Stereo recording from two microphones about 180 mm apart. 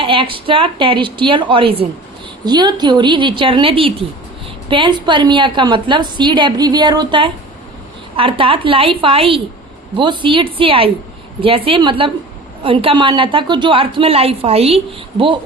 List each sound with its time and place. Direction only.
0.0 s a woman's voice: 30° right (ahead or behind)